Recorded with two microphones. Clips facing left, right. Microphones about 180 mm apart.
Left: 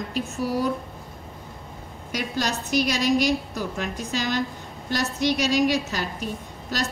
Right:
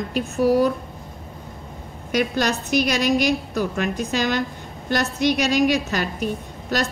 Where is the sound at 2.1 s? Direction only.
65° right (ahead or behind).